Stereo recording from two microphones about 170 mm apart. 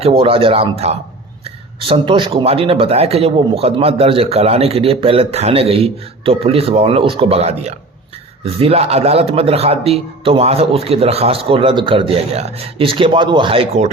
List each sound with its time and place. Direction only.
0.0 s speech: 35° right (ahead or behind)